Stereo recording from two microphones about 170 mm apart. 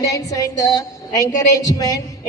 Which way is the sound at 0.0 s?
20° left (ahead or behind).